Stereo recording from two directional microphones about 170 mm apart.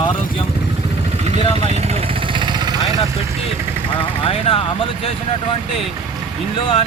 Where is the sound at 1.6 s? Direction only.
40° right (ahead or behind).